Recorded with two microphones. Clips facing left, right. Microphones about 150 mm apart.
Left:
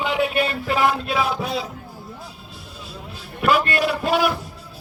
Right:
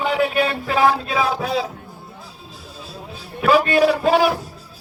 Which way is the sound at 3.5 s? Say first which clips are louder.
Right 5 dB; 35° right (ahead or behind).